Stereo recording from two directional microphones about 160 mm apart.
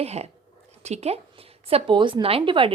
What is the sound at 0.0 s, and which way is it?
A woman's voice, 40° right (ahead or behind).